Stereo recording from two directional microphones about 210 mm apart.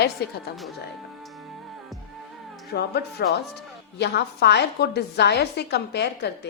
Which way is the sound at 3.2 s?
50° left (ahead or behind).